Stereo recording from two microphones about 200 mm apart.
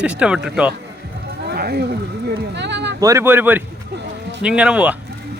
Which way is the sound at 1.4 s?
50° right (ahead or behind).